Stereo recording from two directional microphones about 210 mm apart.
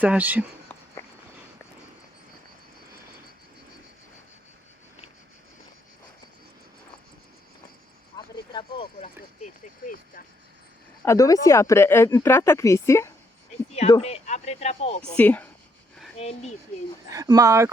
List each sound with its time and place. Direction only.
0.0 s speech: 10° right (ahead or behind)
8.1 s a sound: 20° left (ahead or behind); by 10.2 s 40° left (ahead or behind)
11.0 s speech: 15° left (ahead or behind)
14.0 s speech: 30° left (ahead or behind)
15.1 s speech: 5° left (ahead or behind)
16.1 s speech: 30° left (ahead or behind)
17.1 s speech: 15° right (ahead or behind)